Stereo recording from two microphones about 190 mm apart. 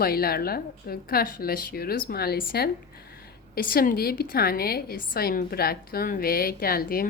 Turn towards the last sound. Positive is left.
turn(degrees=50)  # may be behind; listen again after turning